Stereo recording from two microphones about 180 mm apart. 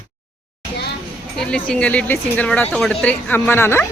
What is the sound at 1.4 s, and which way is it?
Speech, 5° left (ahead or behind).